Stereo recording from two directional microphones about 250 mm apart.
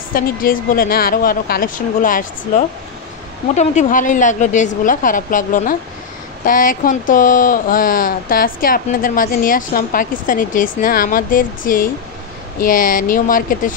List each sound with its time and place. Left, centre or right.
0.1 s speech: left